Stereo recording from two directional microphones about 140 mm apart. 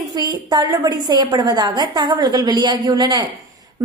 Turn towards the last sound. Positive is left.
turn(degrees=-30)  # may be behind; listen again after turning